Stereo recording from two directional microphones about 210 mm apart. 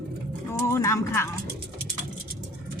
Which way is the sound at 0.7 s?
15° left (ahead or behind).